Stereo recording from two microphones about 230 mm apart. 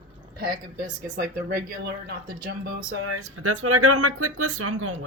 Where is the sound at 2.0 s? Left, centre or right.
Right.